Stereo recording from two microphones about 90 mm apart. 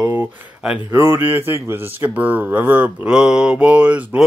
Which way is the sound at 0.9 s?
25° right (ahead or behind).